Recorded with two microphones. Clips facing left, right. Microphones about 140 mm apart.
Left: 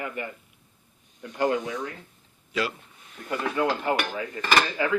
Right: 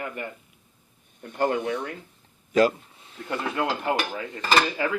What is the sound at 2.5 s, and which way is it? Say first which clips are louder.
Speech: right 9 dB; 45° right (ahead or behind).